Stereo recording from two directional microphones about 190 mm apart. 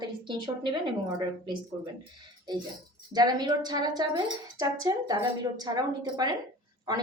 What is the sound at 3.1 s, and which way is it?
Speech, 20° right (ahead or behind).